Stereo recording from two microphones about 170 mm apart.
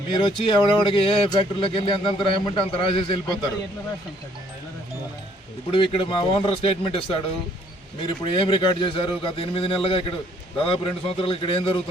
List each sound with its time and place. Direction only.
0.1 s speech: 30° left (ahead or behind)
5.7 s speech: 30° left (ahead or behind)